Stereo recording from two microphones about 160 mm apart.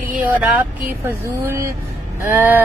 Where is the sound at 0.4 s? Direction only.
10° right (ahead or behind).